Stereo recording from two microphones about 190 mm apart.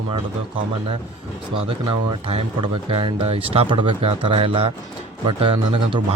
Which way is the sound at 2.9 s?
25° right (ahead or behind).